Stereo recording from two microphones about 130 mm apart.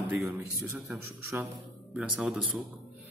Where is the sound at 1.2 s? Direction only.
20° right (ahead or behind).